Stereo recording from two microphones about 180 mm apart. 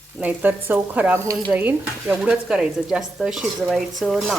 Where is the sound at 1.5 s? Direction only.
10° right (ahead or behind).